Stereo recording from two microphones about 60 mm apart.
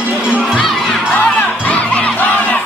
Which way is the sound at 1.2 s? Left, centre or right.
Left.